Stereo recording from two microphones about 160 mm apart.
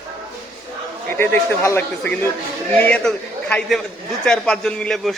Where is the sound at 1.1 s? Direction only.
15° left (ahead or behind).